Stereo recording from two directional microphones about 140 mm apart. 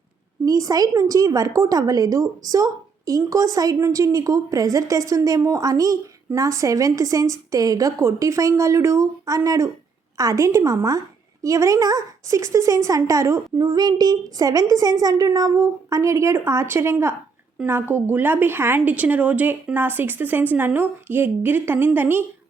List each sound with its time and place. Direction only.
0.4 s a woman's voice: 25° right (ahead or behind)